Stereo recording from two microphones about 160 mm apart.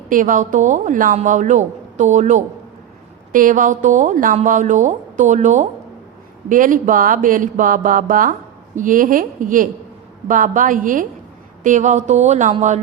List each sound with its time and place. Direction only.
0.1 s a woman's voice: 55° right (ahead or behind)